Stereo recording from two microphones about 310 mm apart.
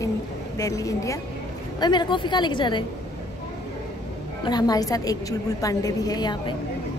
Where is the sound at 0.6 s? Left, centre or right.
Centre.